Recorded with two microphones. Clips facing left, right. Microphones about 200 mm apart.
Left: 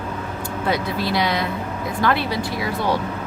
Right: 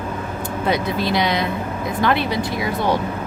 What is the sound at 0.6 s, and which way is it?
Speech, 20° right (ahead or behind).